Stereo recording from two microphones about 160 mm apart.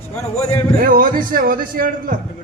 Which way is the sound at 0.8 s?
60° right (ahead or behind).